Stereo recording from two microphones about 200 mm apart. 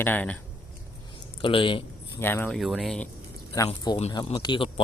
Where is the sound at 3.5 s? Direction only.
20° left (ahead or behind).